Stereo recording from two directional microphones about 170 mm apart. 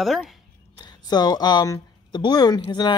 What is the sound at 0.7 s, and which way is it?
Speech, 25° left (ahead or behind).